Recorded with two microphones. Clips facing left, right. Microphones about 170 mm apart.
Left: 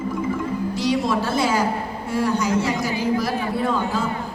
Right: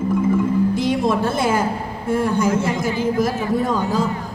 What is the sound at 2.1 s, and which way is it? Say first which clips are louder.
A woman's voice: right 3 dB; 50° right (ahead or behind).